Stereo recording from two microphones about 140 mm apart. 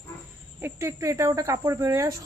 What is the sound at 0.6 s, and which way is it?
Speech, 20° right (ahead or behind).